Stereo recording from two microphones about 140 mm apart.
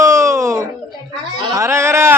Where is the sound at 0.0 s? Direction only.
20° right (ahead or behind).